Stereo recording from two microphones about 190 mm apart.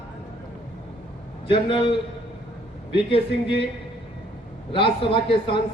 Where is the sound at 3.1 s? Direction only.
30° left (ahead or behind).